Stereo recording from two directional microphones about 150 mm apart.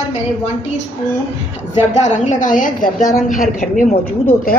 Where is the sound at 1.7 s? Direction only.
50° left (ahead or behind).